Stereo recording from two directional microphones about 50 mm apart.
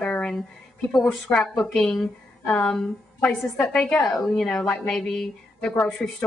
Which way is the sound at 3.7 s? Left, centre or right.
Centre.